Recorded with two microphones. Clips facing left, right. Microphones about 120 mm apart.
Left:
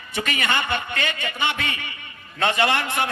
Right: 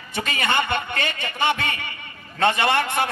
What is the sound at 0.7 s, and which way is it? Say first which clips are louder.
A man's voice: right 1 dB; 40° right (ahead or behind).